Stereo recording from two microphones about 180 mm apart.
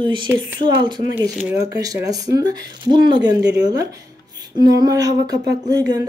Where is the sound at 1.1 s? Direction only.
10° right (ahead or behind).